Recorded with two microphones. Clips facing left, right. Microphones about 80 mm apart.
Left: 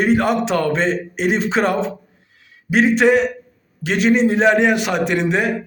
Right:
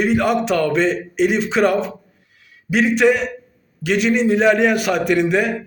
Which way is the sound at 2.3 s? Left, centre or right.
Left.